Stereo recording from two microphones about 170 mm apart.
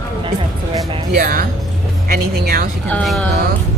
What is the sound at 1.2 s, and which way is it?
Speech, 55° right (ahead or behind).